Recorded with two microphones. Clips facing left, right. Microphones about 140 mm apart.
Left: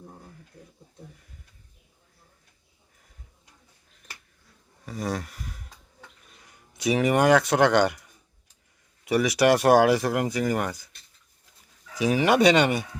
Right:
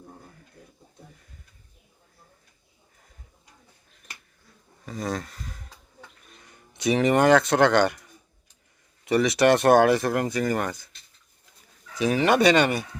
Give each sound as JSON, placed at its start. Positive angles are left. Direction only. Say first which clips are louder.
{"t": 4.9, "sound": "speech", "louder": "even", "side_deg": 10}
{"t": 9.0, "sound": "speech", "louder": "right 1 dB", "side_deg": 10}
{"t": 11.9, "sound": "speech", "louder": "even", "side_deg": 15}